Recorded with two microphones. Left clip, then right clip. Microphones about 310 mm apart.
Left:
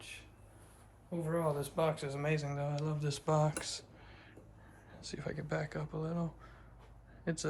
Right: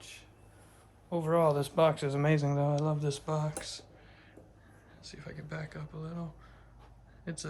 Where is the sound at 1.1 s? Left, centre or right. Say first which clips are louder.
Right 8 dB; right.